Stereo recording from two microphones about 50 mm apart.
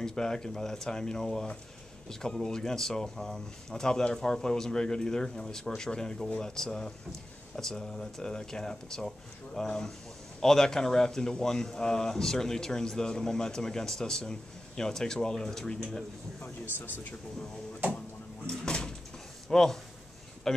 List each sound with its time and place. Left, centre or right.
0.0 s speech: centre
16.4 s speech: left
18.5 s door: centre
19.5 s speech: centre